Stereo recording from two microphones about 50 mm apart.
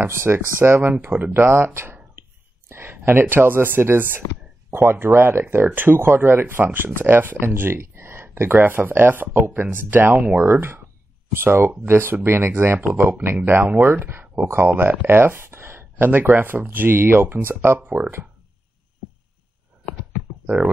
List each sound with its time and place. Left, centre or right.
0.0 s speech: right
8.5 s speech: right
10.4 s speech: right
13.2 s speech: right
14.2 s a sound: centre
14.5 s speech: right
16.1 s speech: right
20.4 s speech: right